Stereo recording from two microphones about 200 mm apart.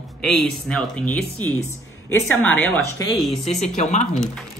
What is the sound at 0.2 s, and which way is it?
A woman's voice, 5° left (ahead or behind).